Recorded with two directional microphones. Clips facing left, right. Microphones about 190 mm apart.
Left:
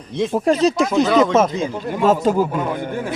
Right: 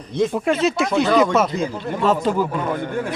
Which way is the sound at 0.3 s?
35° left (ahead or behind).